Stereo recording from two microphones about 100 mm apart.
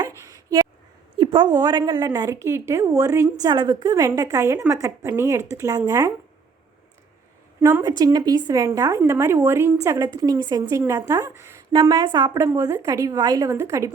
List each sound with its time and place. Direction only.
0.3 s a sound: 35° right (ahead or behind)
1.2 s a woman's voice: 50° right (ahead or behind)
2.0 s a woman's voice: 35° right (ahead or behind)
3.5 s a woman's voice: 50° right (ahead or behind)
3.9 s a woman's voice: 35° right (ahead or behind)
7.6 s a woman's voice: 30° right (ahead or behind)
7.9 s a woman's voice: 40° right (ahead or behind)
11.7 s a woman's voice: 45° right (ahead or behind)
12.3 s a woman's voice: 30° right (ahead or behind)